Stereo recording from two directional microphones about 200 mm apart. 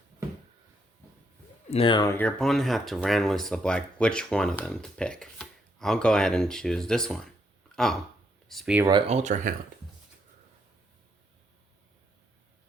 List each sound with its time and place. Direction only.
1.7 s speech: 25° left (ahead or behind); by 7.3 s 5° left (ahead or behind)
8.4 s speech: centre (ahead or behind)
8.9 s speech: 30° right (ahead or behind)